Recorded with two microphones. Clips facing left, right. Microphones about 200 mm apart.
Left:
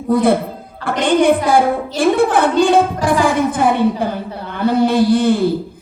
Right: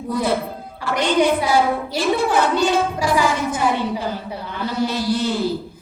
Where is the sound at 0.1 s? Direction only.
55° left (ahead or behind).